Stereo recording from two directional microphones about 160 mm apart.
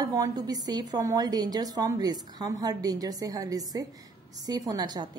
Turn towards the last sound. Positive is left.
turn(degrees=-25)  # may be behind; listen again after turning